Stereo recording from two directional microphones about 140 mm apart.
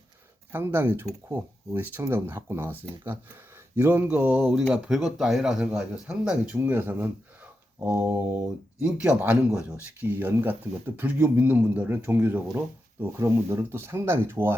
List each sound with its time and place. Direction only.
0.5 s speech: 15° right (ahead or behind)
3.8 s speech: 15° right (ahead or behind)